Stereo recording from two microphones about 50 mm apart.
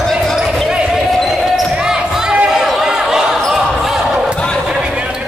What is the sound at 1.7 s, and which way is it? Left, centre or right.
Basketball bounce, centre.